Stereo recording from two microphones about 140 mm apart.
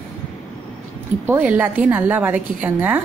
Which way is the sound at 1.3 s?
10° right (ahead or behind).